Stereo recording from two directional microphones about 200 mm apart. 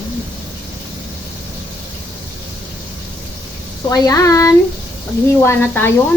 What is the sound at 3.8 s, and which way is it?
Speech, 20° left (ahead or behind).